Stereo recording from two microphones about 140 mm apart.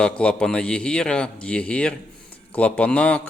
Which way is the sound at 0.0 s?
5° left (ahead or behind).